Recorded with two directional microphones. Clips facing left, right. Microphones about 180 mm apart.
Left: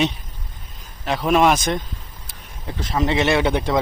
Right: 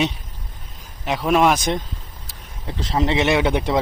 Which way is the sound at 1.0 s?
15° right (ahead or behind).